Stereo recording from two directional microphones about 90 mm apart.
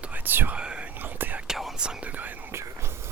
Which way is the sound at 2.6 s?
30° right (ahead or behind).